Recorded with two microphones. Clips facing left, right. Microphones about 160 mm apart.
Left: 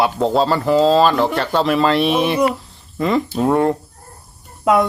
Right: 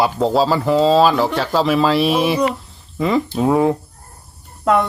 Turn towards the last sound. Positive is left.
turn(degrees=10)  # may be behind; listen again after turning